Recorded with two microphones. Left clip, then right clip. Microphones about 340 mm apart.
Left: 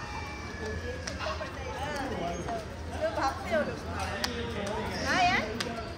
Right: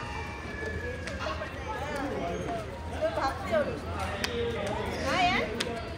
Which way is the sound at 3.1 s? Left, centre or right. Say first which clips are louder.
Even; left.